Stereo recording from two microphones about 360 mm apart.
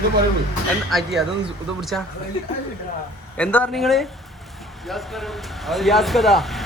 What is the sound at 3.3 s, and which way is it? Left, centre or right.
Speech, centre.